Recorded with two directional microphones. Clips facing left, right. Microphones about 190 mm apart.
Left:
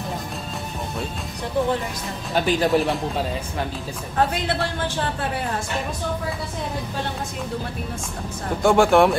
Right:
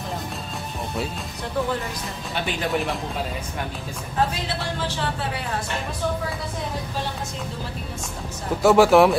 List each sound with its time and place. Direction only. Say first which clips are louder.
2.3 s speech: left 7 dB; 40° left (ahead or behind)
2.7 s speech: left 5 dB; centre (ahead or behind)
4.5 s speech: left 3 dB; 50° left (ahead or behind)
8.6 s speech: right 1 dB; 5° right (ahead or behind)